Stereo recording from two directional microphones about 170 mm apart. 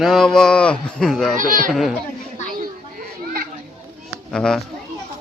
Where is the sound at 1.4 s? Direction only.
50° right (ahead or behind).